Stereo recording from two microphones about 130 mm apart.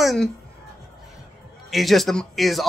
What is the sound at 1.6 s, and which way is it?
Speech, centre (ahead or behind).